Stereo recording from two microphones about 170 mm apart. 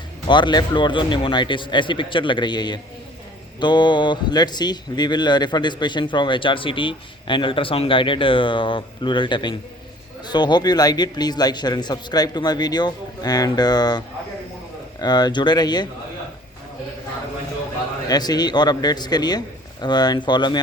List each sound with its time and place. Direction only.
0.3 s speech: 25° left (ahead or behind)
15.0 s speech: 25° left (ahead or behind)
18.1 s speech: 25° left (ahead or behind)